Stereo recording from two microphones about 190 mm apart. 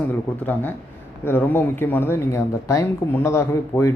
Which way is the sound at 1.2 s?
10° left (ahead or behind).